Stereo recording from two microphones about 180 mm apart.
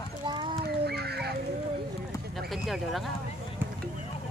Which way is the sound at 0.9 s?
65° right (ahead or behind).